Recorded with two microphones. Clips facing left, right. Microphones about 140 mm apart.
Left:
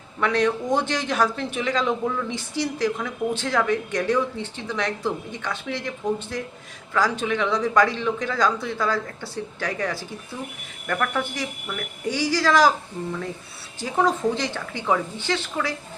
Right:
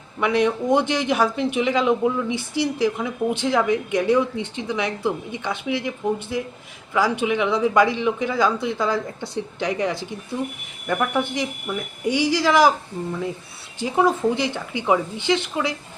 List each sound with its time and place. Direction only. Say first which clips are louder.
0.2 s speech: right 2 dB; 15° right (ahead or behind)